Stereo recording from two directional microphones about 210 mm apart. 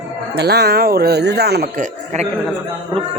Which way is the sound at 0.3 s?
50° right (ahead or behind).